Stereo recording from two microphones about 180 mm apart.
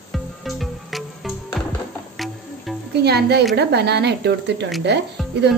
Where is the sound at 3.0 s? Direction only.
65° right (ahead or behind).